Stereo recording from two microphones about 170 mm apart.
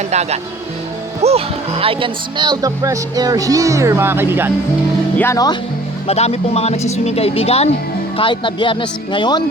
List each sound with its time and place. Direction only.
0.1 s speech: 40° right (ahead or behind); by 4.5 s 15° right (ahead or behind)
5.1 s speech: 15° left (ahead or behind)
6.1 s speech: 40° left (ahead or behind)